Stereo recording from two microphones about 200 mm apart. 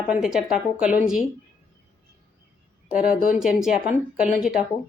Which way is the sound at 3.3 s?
Centre (ahead or behind).